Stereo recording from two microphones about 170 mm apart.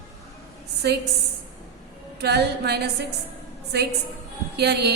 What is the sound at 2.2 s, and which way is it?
Speech, 75° right (ahead or behind).